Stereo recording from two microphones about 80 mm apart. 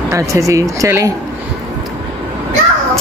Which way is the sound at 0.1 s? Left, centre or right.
Right.